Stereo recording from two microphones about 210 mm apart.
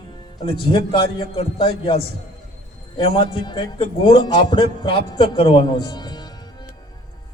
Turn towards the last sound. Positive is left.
turn(degrees=20)  # may be behind; listen again after turning